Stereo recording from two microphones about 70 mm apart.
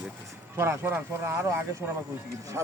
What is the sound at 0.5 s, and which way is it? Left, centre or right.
Speech, right.